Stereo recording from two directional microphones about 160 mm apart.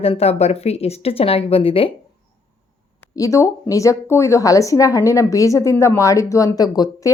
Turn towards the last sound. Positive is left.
turn(degrees=25)  # may be behind; listen again after turning